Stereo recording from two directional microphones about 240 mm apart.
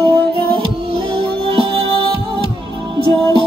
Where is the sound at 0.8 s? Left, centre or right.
Right.